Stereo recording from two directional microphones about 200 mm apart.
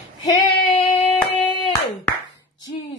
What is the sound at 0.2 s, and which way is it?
Female singing, 25° left (ahead or behind).